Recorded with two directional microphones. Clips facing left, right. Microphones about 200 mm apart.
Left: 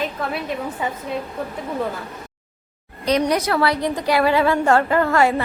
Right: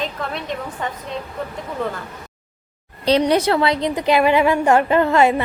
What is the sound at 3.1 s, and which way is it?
A woman's voice, 30° right (ahead or behind).